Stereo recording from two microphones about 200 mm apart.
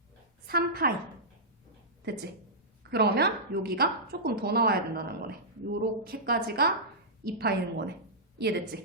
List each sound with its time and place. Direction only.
0.4 s a woman's voice: 50° right (ahead or behind)
2.0 s a woman's voice: 60° right (ahead or behind)